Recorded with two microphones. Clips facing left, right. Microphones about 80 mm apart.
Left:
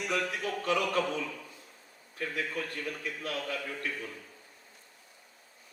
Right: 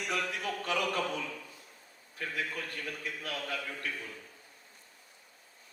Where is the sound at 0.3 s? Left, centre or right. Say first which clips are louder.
Left 3 dB; left.